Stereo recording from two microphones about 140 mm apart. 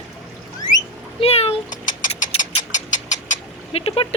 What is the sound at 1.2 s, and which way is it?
Speech, 45° left (ahead or behind).